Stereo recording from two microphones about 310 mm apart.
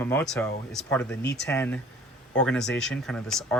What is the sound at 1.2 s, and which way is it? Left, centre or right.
Speech, left.